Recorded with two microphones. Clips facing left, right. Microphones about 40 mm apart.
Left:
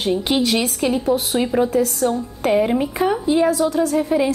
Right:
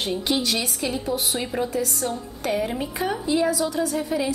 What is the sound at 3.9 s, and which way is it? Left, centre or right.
Speech, left.